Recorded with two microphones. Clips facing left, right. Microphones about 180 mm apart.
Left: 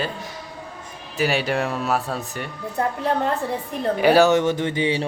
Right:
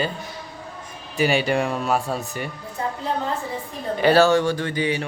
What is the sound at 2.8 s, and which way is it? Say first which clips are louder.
Speech: left 4 dB; 60° left (ahead or behind).